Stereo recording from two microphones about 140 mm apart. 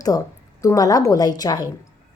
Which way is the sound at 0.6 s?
25° left (ahead or behind).